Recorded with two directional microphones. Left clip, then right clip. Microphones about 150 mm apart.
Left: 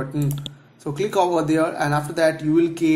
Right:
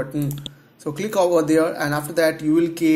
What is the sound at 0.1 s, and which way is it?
Speech, 25° right (ahead or behind).